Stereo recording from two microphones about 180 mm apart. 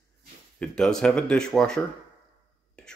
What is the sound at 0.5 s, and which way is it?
Speech, 5° left (ahead or behind).